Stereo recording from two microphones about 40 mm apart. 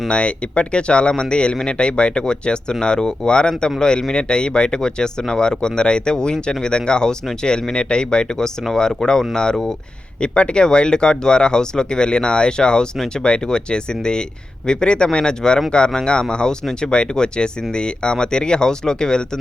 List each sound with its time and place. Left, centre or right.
0.1 s speech: left